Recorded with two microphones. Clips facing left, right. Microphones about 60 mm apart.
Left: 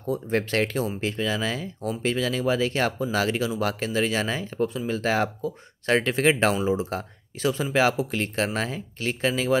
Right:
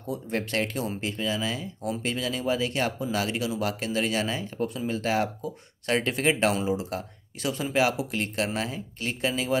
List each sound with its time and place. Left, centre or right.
0.0 s speech: left